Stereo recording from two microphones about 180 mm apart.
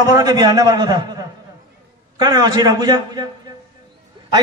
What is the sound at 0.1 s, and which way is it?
A man's voice, 20° right (ahead or behind).